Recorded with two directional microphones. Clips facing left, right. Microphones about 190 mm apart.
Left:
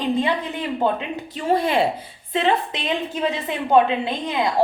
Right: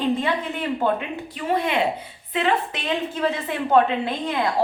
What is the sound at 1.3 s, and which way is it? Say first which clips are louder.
Speech: left 3 dB; 35° left (ahead or behind).